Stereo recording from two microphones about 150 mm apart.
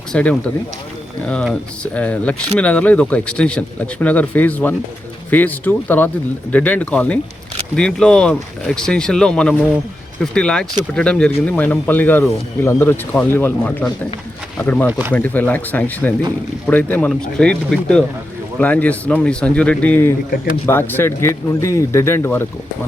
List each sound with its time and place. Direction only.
0.1 s speech: 10° left (ahead or behind)
14.8 s speech: 15° right (ahead or behind)
15.1 s speech: 10° left (ahead or behind)